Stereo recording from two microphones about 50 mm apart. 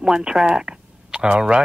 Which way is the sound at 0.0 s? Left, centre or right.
Centre.